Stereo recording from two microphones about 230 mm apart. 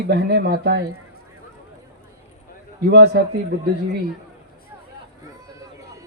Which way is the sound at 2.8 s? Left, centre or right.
Right.